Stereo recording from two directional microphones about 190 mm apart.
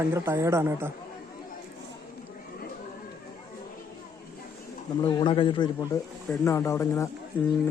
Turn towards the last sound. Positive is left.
turn(degrees=10)  # may be behind; listen again after turning